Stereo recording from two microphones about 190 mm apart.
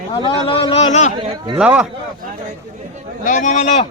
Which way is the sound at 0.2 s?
30° left (ahead or behind).